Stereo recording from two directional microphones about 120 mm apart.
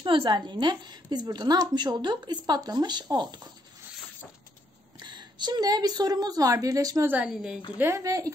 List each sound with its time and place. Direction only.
0.0 s a woman's voice: 45° right (ahead or behind)
4.9 s a woman's voice: 40° right (ahead or behind)
7.1 s a woman's voice: 10° right (ahead or behind)
8.0 s speech: 30° right (ahead or behind)